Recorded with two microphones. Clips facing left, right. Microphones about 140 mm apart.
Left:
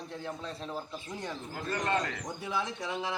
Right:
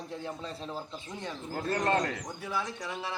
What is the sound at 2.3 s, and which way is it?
Speech, centre (ahead or behind).